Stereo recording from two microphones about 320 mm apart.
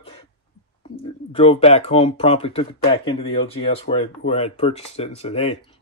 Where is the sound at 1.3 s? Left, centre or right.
Centre.